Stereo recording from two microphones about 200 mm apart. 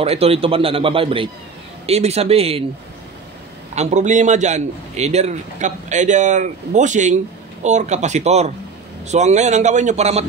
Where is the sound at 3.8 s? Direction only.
35° right (ahead or behind).